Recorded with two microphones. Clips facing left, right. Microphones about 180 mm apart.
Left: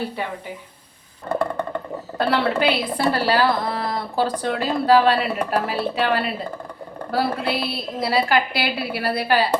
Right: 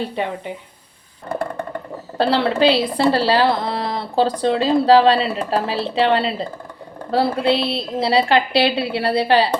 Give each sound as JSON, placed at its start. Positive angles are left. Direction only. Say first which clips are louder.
{"t": 2.1, "sound": "a woman's voice", "louder": "right 3 dB", "side_deg": -30}